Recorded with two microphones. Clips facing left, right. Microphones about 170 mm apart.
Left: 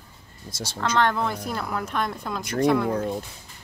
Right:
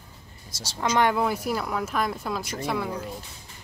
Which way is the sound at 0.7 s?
10° right (ahead or behind).